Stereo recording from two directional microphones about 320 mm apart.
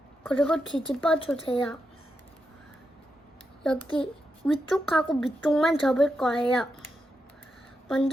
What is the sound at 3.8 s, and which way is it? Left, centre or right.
A child's voice, centre.